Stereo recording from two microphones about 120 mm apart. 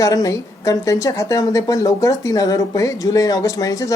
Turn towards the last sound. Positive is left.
turn(degrees=30)  # may be behind; listen again after turning